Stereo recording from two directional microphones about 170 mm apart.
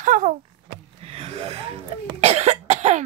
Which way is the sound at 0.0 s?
50° right (ahead or behind).